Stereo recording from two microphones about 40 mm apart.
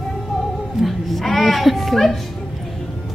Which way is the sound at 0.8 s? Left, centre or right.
Centre.